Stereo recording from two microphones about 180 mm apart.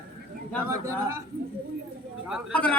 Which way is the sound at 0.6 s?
15° right (ahead or behind).